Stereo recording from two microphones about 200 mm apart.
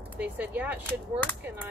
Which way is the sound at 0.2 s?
10° right (ahead or behind).